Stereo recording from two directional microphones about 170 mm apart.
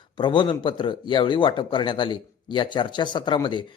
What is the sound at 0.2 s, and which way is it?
A man's voice, 30° left (ahead or behind).